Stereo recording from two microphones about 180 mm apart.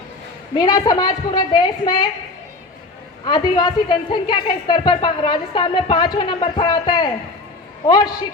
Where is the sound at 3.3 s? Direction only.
25° left (ahead or behind).